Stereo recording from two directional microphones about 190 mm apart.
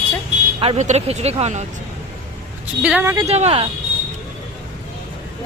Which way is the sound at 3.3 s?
35° right (ahead or behind).